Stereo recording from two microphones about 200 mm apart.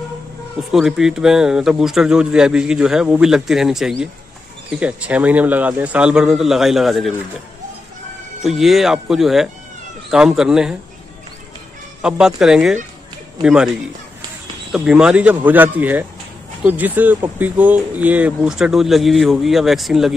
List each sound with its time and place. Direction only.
0.7 s speech: centre (ahead or behind)
8.5 s speech: centre (ahead or behind)
12.0 s speech: 5° right (ahead or behind)
14.7 s speech: 5° right (ahead or behind)